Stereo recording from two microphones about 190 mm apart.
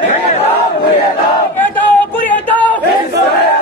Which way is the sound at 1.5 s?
10° left (ahead or behind).